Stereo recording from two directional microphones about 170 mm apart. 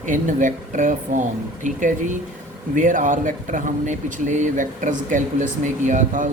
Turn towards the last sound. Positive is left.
turn(degrees=-45)  # may be behind; listen again after turning